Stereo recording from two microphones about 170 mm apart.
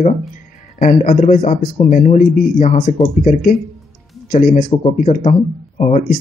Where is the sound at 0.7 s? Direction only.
50° left (ahead or behind).